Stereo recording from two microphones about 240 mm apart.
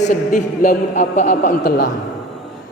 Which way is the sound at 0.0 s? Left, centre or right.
Left.